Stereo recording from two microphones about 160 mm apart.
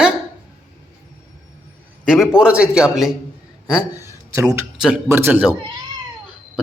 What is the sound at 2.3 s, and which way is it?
Speech, 5° right (ahead or behind).